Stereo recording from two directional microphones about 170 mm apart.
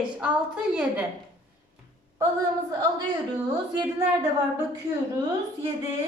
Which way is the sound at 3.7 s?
25° right (ahead or behind).